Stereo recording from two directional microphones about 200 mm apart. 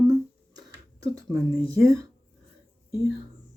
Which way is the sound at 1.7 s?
15° right (ahead or behind).